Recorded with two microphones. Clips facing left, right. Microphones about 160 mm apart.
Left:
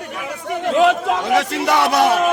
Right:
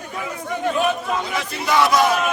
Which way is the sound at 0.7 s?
85° left.